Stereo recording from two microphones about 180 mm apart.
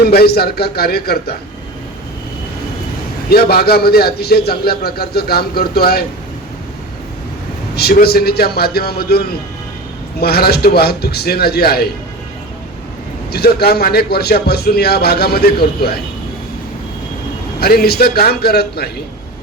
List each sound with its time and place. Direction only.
0.0 s a man's voice: 60° left (ahead or behind)
3.2 s a man's voice: 60° left (ahead or behind)
7.8 s a man's voice: 60° left (ahead or behind)
13.3 s a man's voice: 60° left (ahead or behind)
17.6 s a man's voice: 60° left (ahead or behind)